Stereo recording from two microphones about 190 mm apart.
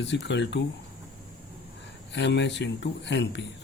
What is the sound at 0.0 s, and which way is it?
Speech, 65° left (ahead or behind).